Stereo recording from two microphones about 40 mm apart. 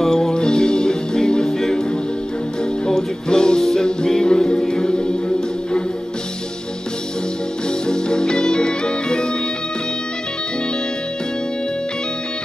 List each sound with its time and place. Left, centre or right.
0.0 s music: centre
2.9 s music: centre
7.9 s music: left